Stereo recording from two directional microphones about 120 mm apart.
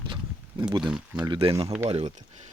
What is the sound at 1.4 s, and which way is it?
Speech, 50° right (ahead or behind).